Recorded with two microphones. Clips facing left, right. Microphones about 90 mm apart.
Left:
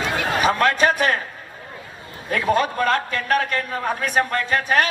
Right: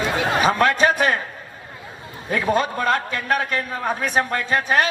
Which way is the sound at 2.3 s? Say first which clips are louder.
Left 1 dB; 25° right (ahead or behind).